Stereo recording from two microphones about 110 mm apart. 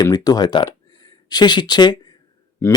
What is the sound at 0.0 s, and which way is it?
Speech, 35° left (ahead or behind).